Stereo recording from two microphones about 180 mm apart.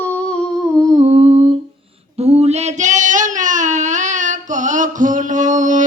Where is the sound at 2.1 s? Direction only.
35° right (ahead or behind).